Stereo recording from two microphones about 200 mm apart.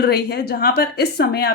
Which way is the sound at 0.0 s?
55° left (ahead or behind).